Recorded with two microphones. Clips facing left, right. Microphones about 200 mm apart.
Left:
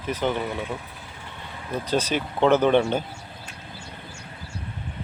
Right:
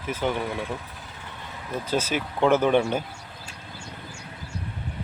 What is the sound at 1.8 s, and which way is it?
Speech, 5° right (ahead or behind).